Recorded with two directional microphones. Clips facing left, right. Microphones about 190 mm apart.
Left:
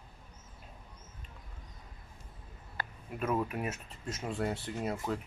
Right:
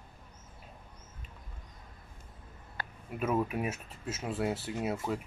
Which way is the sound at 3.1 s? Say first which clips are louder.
Right 2 dB; 5° right (ahead or behind).